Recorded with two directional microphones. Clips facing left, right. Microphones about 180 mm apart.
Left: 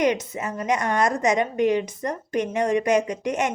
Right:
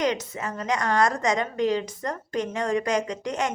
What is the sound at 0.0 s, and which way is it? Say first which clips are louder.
A woman's voice: left 3 dB; 20° left (ahead or behind).